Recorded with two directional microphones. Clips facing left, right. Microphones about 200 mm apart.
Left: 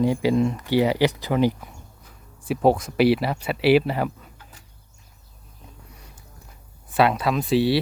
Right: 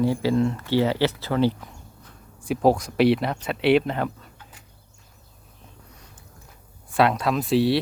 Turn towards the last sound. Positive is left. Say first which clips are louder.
# even
turn(degrees=0)  # may be behind; listen again after turning